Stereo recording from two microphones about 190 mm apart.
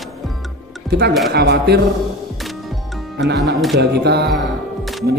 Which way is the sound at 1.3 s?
60° right (ahead or behind).